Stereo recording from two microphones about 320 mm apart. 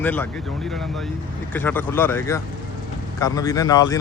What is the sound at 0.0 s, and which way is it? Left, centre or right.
Speech, centre.